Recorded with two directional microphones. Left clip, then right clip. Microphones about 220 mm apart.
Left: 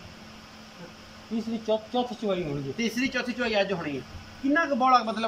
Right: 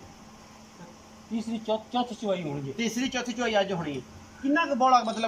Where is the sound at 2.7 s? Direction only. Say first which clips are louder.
Left 2 dB; 10° right (ahead or behind).